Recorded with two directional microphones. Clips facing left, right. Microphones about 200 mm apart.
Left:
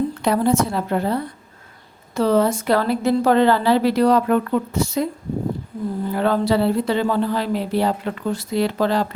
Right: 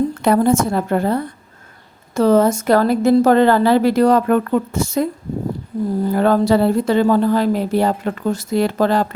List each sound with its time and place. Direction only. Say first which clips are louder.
0.2 s speech: right 4 dB; 50° right (ahead or behind)